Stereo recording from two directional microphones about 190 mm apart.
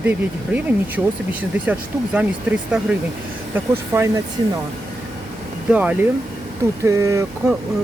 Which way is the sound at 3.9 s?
15° right (ahead or behind).